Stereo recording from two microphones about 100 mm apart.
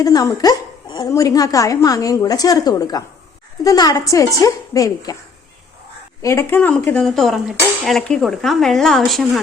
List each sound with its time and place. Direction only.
0.0 s a woman's voice: 40° left (ahead or behind)
6.2 s speech: 25° left (ahead or behind); by 9.4 s centre (ahead or behind)